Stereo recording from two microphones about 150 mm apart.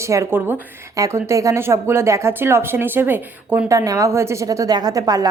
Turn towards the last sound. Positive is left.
turn(degrees=-25)  # may be behind; listen again after turning